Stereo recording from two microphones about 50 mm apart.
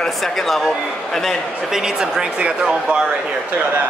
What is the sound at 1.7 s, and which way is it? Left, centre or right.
Speech, centre.